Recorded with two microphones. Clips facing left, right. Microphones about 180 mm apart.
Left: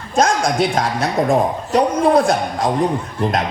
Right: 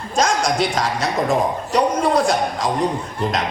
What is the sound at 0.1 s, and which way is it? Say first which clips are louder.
Speech: left 3 dB; 55° left (ahead or behind).